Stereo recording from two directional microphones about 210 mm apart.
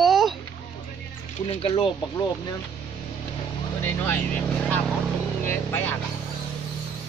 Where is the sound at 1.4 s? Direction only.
30° left (ahead or behind).